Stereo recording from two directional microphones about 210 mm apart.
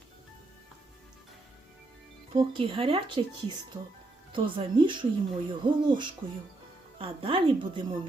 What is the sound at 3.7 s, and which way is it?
Speech, 10° right (ahead or behind).